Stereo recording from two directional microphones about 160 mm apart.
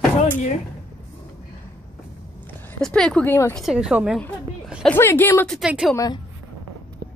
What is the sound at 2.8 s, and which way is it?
A woman's voice, 5° left (ahead or behind).